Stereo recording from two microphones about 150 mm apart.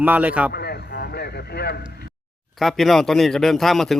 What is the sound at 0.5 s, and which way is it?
Radio, 90° left.